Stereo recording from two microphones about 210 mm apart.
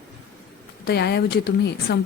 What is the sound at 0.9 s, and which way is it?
A woman's voice, 50° left (ahead or behind).